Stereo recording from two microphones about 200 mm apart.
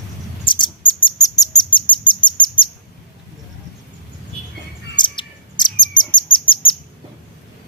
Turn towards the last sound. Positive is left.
turn(degrees=25)  # may be behind; listen again after turning